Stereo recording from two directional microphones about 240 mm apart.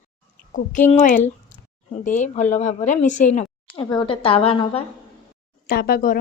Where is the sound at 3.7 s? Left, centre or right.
Centre.